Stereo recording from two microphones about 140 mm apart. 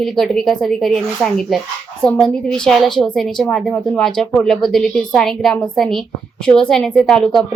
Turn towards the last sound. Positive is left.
turn(degrees=5)  # may be behind; listen again after turning